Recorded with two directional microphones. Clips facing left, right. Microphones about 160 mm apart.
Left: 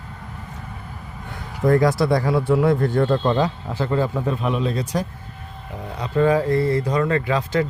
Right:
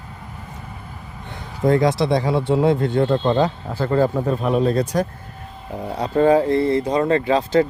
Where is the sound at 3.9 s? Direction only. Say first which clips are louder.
Right 4 dB; 40° right (ahead or behind).